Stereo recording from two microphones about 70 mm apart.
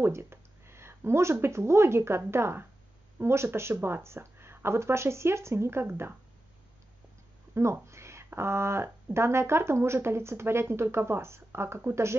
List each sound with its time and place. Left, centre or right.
0.0 s speech: right
7.5 s speech: right